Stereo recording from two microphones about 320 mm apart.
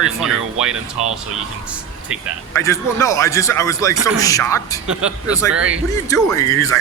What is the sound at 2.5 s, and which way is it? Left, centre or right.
A man's voice, centre.